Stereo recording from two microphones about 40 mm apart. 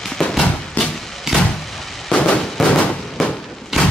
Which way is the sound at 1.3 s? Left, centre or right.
Centre.